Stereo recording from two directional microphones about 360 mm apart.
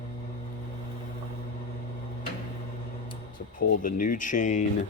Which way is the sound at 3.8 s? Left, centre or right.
Left.